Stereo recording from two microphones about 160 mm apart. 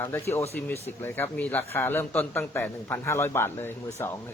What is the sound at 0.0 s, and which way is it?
A man's voice, 15° left (ahead or behind).